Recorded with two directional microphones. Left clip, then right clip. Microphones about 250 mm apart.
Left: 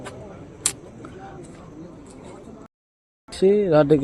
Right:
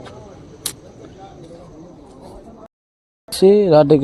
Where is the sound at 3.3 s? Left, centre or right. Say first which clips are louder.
Right 6 dB; centre.